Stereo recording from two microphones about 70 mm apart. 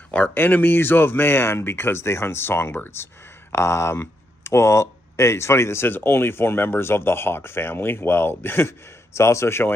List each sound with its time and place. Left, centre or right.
0.1 s speech: left